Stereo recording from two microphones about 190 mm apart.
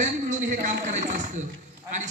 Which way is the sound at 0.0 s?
40° right (ahead or behind).